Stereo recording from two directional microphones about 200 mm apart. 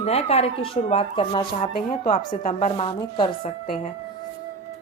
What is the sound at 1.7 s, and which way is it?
Speech, 45° left (ahead or behind).